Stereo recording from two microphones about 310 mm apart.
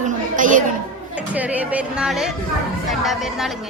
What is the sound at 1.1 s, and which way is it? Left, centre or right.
A woman's voice, centre.